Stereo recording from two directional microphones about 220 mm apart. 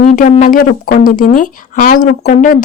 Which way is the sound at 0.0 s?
35° left (ahead or behind).